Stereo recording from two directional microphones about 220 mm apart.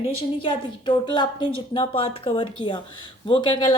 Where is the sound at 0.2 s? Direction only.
20° left (ahead or behind).